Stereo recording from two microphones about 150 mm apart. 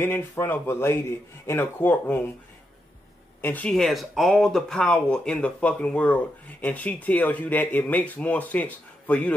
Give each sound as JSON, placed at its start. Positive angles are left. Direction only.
{"t": 0.0, "sound": "speech", "side_deg": 15}
{"t": 3.3, "sound": "speech", "side_deg": 10}